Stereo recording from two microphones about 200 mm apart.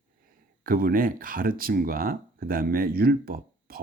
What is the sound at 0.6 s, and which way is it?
Speech, 45° right (ahead or behind).